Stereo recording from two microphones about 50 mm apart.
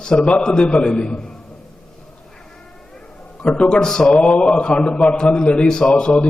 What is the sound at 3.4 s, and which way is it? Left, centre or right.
A man's voice, left.